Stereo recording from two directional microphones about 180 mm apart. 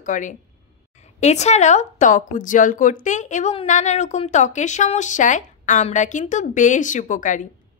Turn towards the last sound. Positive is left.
turn(degrees=45)  # may be behind; listen again after turning